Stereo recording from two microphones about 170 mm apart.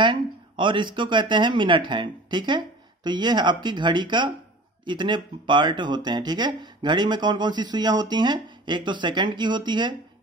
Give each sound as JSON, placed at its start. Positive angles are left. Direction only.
{"t": 0.0, "sound": "speech", "side_deg": -30}